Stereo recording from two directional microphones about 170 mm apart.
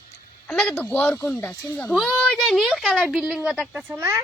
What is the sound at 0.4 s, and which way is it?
Speech, 10° left (ahead or behind).